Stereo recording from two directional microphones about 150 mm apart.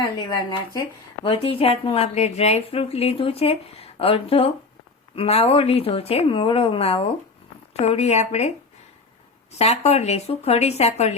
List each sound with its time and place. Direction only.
0.0 s a woman's voice: 30° left (ahead or behind)